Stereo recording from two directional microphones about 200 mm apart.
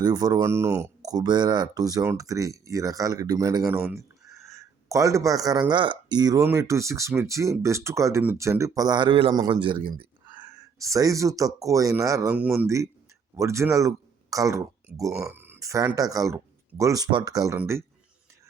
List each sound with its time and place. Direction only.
0.0 s speech: 20° right (ahead or behind)
15.3 s a sound: 10° right (ahead or behind)
16.0 s speech: 15° right (ahead or behind)